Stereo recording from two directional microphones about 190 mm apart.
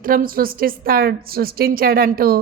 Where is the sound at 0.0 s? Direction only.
50° right (ahead or behind).